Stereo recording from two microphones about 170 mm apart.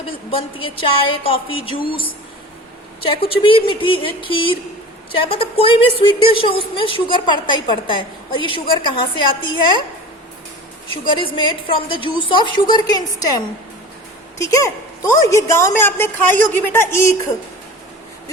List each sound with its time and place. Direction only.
0.3 s a woman's voice: 30° left (ahead or behind)
3.2 s a woman's voice: 30° left (ahead or behind)
11.0 s a woman's voice: 30° left (ahead or behind)